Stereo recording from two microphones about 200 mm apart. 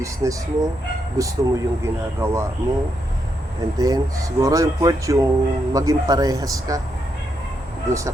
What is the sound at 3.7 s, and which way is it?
Speech, 20° right (ahead or behind).